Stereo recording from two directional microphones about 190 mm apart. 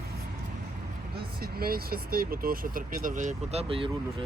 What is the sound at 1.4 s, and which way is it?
Speech, 55° right (ahead or behind).